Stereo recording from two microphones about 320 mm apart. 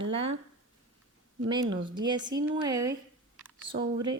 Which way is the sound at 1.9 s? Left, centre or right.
Centre.